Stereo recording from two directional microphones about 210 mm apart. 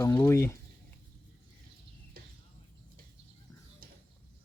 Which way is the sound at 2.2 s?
45° right (ahead or behind).